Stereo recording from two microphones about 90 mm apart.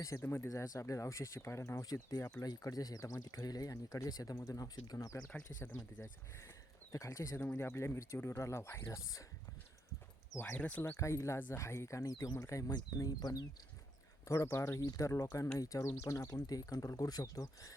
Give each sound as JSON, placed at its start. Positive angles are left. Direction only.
{"t": 0.0, "sound": "speech", "side_deg": 35}
{"t": 1.9, "sound": "speech", "side_deg": 45}
{"t": 5.5, "sound": "speech", "side_deg": 20}
{"t": 6.9, "sound": "speech", "side_deg": 35}
{"t": 7.3, "sound": "speech", "side_deg": 25}
{"t": 10.4, "sound": "speech", "side_deg": 15}
{"t": 10.9, "sound": "speech", "side_deg": 35}
{"t": 14.3, "sound": "speech", "side_deg": 30}
{"t": 14.8, "sound": "speech", "side_deg": 40}